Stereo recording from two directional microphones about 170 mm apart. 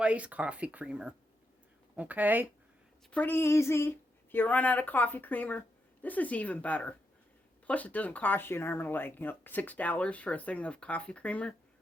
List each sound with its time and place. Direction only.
0.0 s speech: 5° right (ahead or behind)
3.1 s speech: 10° left (ahead or behind)